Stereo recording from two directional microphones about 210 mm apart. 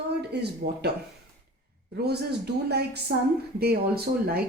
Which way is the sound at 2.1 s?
50° right (ahead or behind).